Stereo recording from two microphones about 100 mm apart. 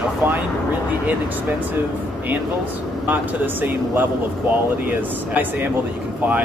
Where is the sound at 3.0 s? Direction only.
15° right (ahead or behind).